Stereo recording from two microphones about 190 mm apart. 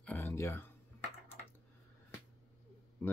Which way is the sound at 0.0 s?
10° left (ahead or behind).